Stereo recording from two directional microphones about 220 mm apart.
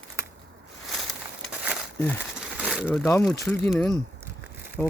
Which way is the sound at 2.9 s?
10° left (ahead or behind).